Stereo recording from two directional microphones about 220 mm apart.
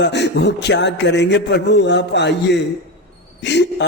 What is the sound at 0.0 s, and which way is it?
Speech, 50° left (ahead or behind).